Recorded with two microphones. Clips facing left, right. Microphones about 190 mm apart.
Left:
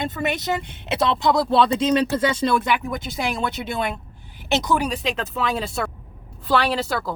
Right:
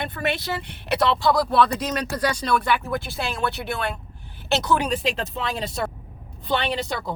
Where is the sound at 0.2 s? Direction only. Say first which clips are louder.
Left 1 dB; 20° left (ahead or behind).